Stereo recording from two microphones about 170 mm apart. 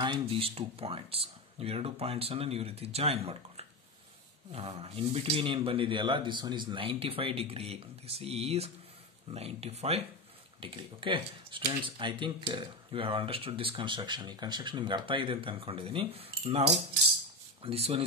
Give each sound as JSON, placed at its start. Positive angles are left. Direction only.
{"t": 0.0, "sound": "speech", "side_deg": -30}